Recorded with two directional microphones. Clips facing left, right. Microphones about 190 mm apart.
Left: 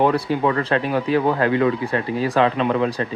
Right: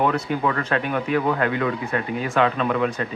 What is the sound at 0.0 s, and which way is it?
Speech, 30° left (ahead or behind).